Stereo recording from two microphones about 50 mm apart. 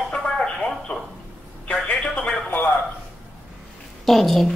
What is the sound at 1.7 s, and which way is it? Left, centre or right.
Telephone, left.